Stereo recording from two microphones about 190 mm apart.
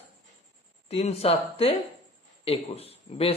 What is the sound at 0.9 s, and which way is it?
Speech, 30° left (ahead or behind).